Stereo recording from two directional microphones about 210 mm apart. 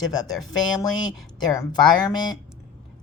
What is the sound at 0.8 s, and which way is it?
A woman's voice, 15° left (ahead or behind).